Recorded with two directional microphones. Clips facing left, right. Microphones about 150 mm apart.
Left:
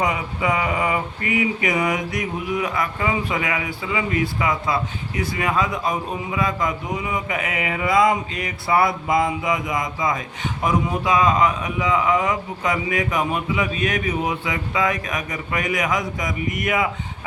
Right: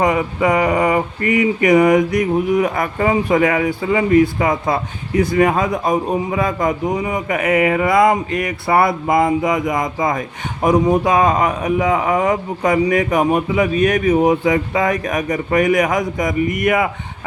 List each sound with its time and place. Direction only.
0.0 s a man's voice: 45° right (ahead or behind)